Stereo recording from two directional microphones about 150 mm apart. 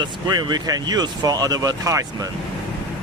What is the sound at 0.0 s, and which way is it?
Speech, 30° right (ahead or behind).